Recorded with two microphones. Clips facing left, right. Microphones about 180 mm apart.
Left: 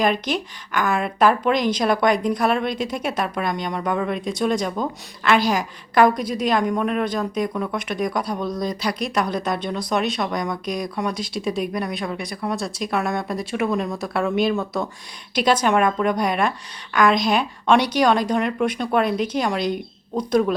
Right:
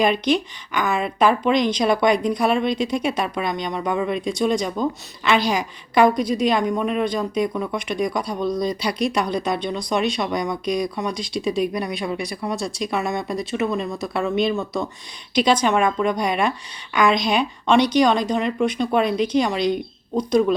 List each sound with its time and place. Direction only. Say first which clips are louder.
0.0 s speech: right 3 dB; centre (ahead or behind)
3.8 s speech: right 2 dB; 5° right (ahead or behind)